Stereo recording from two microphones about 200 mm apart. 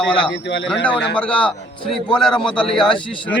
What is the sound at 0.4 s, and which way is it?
Speech, 60° left (ahead or behind).